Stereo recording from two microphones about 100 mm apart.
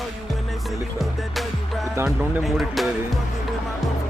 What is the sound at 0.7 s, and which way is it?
Music, centre (ahead or behind).